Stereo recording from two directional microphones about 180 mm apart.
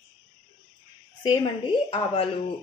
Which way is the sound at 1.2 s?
30° left (ahead or behind).